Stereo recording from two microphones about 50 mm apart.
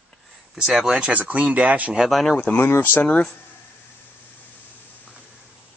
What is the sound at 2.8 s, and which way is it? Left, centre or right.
Speech, left.